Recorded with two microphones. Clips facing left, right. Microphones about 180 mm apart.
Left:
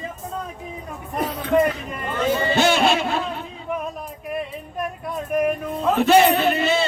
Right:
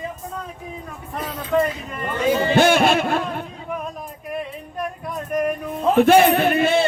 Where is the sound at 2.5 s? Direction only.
50° right (ahead or behind).